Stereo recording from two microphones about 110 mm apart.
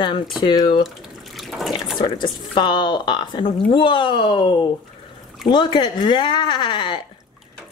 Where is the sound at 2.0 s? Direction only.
45° left (ahead or behind).